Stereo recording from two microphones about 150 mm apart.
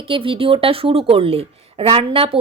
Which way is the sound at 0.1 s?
35° right (ahead or behind).